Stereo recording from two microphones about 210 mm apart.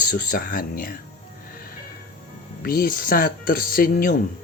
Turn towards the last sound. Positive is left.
turn(degrees=40)  # may be behind; listen again after turning